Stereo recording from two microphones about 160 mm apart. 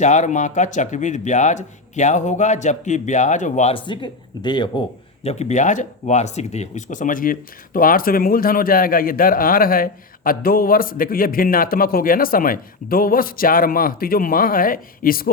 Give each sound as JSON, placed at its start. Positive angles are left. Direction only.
{"t": 0.0, "sound": "speech", "side_deg": 50}
{"t": 5.2, "sound": "speech", "side_deg": 45}